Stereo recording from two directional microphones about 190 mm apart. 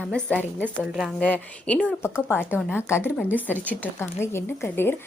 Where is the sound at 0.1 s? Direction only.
5° left (ahead or behind).